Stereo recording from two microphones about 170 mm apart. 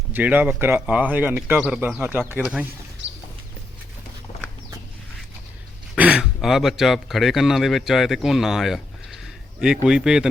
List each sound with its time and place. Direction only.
0.1 s speech: 10° right (ahead or behind)
3.0 s a sound: 90° right
6.0 s speech: 5° right (ahead or behind)